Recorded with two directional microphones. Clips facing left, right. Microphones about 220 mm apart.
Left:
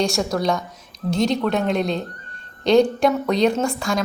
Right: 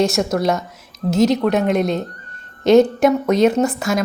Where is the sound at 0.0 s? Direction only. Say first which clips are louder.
Right 4 dB; centre (ahead or behind).